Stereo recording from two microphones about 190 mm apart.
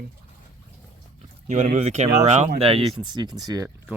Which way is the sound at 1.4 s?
40° right (ahead or behind).